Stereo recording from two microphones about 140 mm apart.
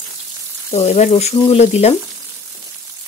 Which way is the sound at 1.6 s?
50° left (ahead or behind).